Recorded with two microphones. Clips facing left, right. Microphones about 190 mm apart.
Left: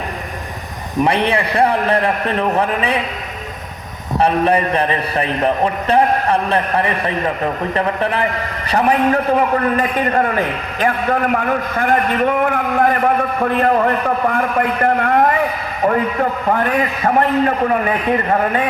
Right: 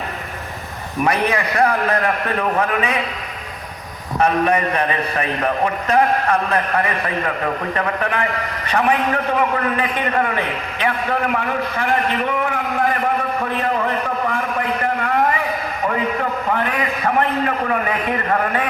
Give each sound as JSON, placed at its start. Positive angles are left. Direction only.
{"t": 1.0, "sound": "a man's voice", "side_deg": 30}
{"t": 4.2, "sound": "a man's voice", "side_deg": 30}
{"t": 9.6, "sound": "a man's voice", "side_deg": 40}
{"t": 16.5, "sound": "a man's voice", "side_deg": 45}